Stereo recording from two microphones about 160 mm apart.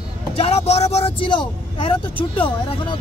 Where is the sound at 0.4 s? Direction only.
40° left (ahead or behind).